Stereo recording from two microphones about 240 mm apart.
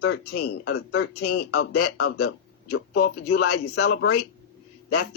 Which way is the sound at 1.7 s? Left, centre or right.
Left.